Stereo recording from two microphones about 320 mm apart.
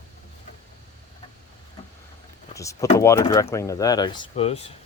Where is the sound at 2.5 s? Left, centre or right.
Centre.